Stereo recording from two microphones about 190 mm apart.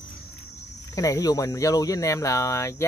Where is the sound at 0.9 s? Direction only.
20° left (ahead or behind).